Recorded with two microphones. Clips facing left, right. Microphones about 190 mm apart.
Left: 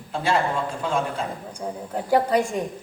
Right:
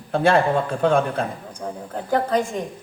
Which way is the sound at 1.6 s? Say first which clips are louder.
Even; 15° left (ahead or behind).